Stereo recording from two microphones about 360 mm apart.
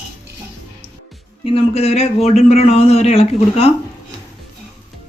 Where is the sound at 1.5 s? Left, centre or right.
Centre.